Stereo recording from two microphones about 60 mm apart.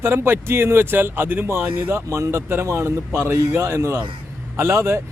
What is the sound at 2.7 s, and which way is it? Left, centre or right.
Speech, right.